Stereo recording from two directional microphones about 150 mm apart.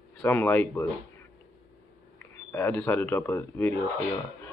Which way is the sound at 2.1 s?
15° left (ahead or behind).